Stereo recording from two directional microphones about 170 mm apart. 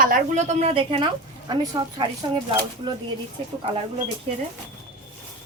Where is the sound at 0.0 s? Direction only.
50° right (ahead or behind); by 2.0 s 25° right (ahead or behind).